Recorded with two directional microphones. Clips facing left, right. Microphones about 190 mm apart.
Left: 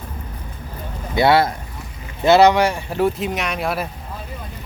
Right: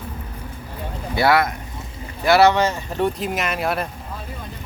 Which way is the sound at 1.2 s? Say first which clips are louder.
Left 3 dB; 25° left (ahead or behind).